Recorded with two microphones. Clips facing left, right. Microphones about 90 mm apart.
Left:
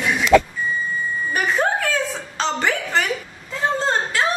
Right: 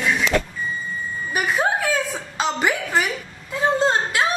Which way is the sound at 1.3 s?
10° right (ahead or behind).